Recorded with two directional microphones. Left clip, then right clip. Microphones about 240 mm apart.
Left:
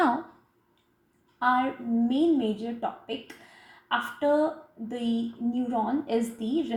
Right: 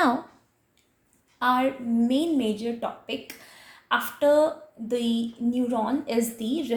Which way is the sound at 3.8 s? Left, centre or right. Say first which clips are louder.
Right 4 dB; right.